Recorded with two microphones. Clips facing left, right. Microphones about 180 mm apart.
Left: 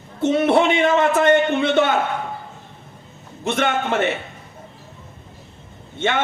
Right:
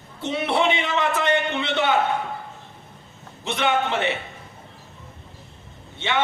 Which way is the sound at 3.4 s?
50° left (ahead or behind).